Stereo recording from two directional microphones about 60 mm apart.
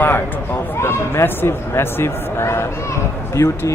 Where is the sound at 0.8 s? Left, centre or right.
Left.